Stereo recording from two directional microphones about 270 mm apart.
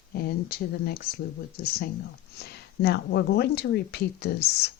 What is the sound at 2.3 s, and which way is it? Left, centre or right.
Speech, left.